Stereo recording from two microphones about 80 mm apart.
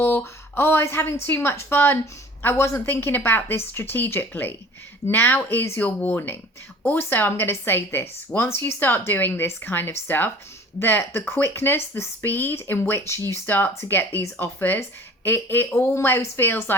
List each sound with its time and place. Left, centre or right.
0.5 s a woman's voice: left